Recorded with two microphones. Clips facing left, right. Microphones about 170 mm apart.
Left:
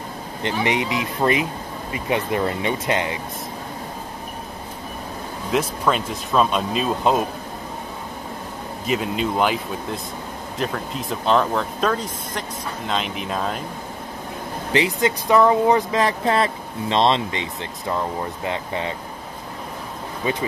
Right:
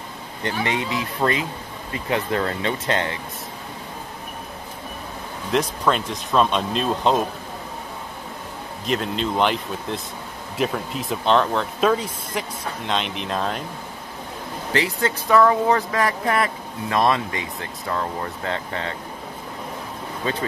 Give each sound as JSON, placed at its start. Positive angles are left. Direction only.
{"t": 0.4, "sound": "speech", "side_deg": 20}
{"t": 5.5, "sound": "speech", "side_deg": 5}
{"t": 8.8, "sound": "speech", "side_deg": 5}
{"t": 14.7, "sound": "speech", "side_deg": 20}
{"t": 20.2, "sound": "speech", "side_deg": 15}